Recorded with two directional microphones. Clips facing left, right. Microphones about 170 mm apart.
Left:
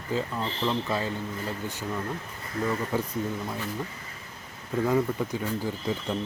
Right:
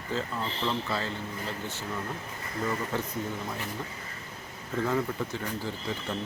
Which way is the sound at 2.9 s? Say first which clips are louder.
Left 3 dB; 10° left (ahead or behind).